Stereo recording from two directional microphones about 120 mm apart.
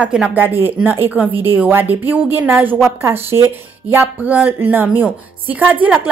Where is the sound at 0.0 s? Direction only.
10° right (ahead or behind).